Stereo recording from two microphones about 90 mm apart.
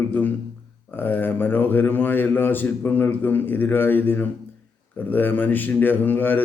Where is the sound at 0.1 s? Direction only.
20° left (ahead or behind).